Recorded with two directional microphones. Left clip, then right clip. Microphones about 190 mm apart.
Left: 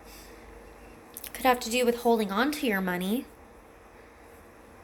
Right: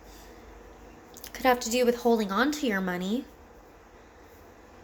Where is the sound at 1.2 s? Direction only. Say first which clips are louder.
Even; 10° right (ahead or behind).